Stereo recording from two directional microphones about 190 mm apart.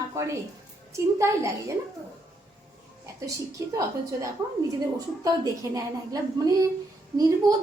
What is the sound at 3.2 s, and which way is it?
A woman's voice, 15° right (ahead or behind).